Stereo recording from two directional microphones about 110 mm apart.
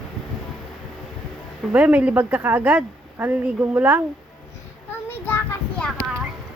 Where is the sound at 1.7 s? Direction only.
15° right (ahead or behind).